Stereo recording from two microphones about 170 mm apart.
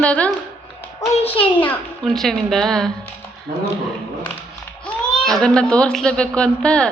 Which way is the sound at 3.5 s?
55° right (ahead or behind).